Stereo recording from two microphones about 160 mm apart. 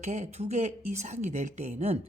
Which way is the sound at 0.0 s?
45° right (ahead or behind).